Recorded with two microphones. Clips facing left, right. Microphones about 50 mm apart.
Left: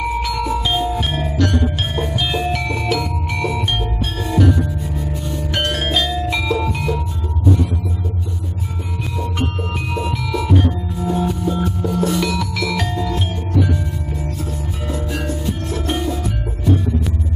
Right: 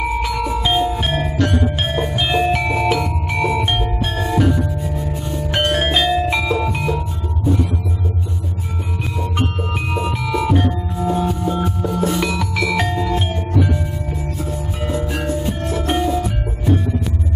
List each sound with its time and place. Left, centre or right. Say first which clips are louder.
0.0 s music: even; centre
9.2 s music: right 1 dB; centre